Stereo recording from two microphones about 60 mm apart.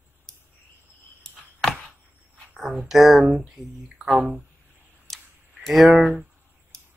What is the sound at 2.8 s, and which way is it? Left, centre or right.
Speech, centre.